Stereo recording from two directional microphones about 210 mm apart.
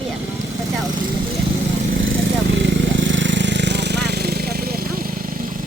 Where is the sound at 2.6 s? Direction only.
60° right (ahead or behind); by 5.1 s 45° right (ahead or behind).